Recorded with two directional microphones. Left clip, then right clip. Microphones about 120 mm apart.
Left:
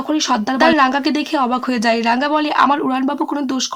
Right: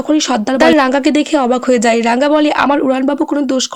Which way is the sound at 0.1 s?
40° right (ahead or behind).